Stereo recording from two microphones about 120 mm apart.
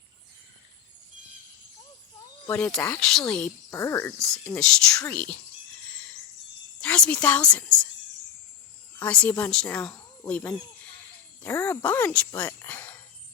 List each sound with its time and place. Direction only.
2.7 s a woman's voice: 10° left (ahead or behind)
3.7 s speech: 25° left (ahead or behind)
4.2 s speech: 5° left (ahead or behind)
6.7 s speech: 10° left (ahead or behind)
9.0 s speech: 10° left (ahead or behind)